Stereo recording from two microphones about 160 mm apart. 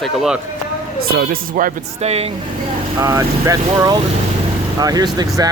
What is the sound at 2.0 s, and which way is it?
Speech, 40° right (ahead or behind).